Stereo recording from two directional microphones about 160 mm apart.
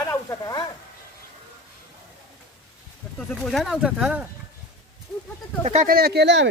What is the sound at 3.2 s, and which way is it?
Speech, centre (ahead or behind).